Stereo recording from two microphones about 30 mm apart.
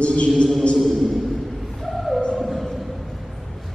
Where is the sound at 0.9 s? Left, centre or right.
Centre.